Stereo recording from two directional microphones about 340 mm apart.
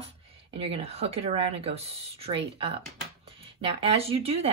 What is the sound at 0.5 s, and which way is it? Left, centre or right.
Speech, centre.